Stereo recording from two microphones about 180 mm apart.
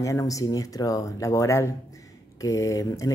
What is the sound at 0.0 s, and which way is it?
Speech, 20° left (ahead or behind).